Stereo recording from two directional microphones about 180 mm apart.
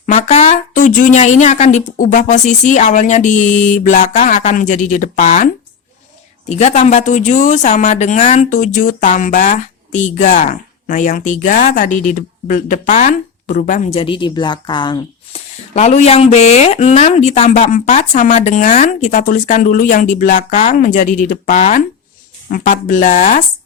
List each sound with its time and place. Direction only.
0.0 s speech: 40° left (ahead or behind)
6.5 s speech: 35° left (ahead or behind)
15.7 s speech: 40° left (ahead or behind)